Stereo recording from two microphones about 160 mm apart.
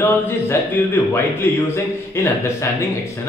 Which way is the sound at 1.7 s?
15° left (ahead or behind).